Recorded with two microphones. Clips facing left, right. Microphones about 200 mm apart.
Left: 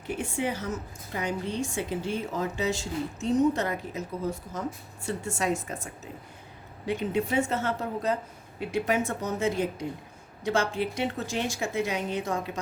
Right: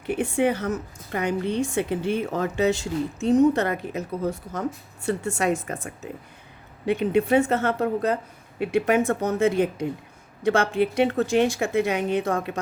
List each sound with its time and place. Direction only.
0.2 s a woman's voice: 60° right (ahead or behind)
5.0 s a woman's voice: 65° right (ahead or behind)